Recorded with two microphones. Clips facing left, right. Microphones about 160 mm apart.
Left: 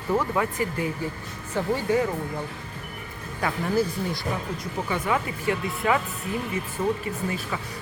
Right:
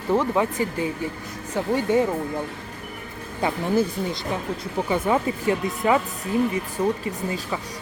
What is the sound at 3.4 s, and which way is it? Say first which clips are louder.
Speech: right 3 dB; 25° right (ahead or behind).